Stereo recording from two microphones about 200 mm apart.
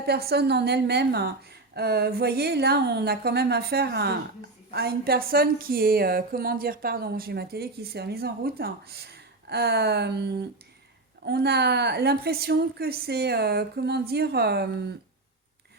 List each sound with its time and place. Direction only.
0.0 s a woman's voice: 55° right (ahead or behind)